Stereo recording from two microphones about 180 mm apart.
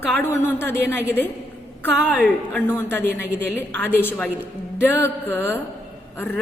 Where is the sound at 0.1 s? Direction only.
15° left (ahead or behind).